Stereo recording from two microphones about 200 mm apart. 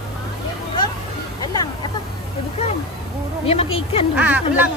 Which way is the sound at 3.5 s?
30° left (ahead or behind).